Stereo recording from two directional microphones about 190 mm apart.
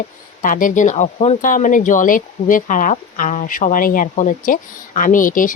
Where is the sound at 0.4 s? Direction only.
45° left (ahead or behind).